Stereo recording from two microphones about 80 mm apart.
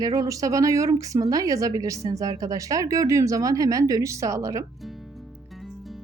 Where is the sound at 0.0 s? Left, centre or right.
Right.